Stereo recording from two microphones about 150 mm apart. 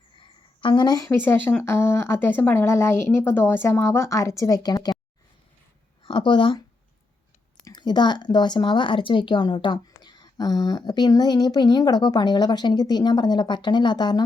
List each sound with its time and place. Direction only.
0.2 s a sound: 30° left (ahead or behind)
1.1 s speech: 15° left (ahead or behind)
6.0 s speech: 35° left (ahead or behind)